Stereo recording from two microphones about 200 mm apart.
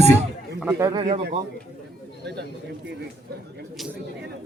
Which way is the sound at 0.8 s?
20° right (ahead or behind).